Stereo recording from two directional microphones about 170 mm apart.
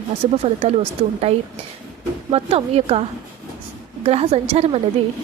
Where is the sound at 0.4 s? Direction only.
35° right (ahead or behind).